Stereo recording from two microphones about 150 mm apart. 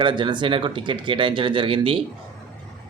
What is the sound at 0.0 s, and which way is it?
Speech, 30° right (ahead or behind).